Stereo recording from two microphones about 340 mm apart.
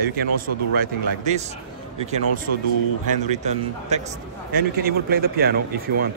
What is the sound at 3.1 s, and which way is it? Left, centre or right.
A man's voice, centre.